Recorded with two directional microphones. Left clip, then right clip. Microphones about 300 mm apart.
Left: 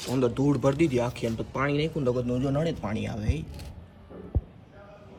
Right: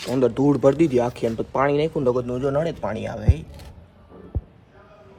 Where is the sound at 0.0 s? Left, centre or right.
Right.